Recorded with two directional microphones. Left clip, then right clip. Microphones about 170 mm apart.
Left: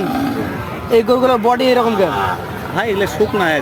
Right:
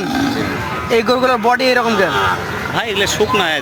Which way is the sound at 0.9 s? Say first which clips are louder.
Left 1 dB; 5° left (ahead or behind).